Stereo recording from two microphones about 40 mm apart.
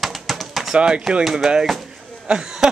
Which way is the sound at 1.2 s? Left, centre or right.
Centre.